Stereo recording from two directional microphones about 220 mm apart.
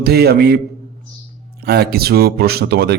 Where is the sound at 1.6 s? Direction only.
45° right (ahead or behind).